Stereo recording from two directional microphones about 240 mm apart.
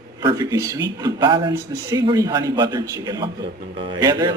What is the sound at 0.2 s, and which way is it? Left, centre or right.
A man's voice, centre.